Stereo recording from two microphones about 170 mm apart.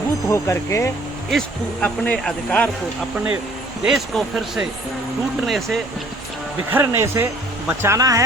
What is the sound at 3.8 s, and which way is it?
Speech, 5° right (ahead or behind).